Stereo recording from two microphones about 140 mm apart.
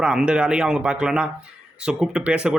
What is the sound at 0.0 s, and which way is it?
A man's voice, 5° right (ahead or behind).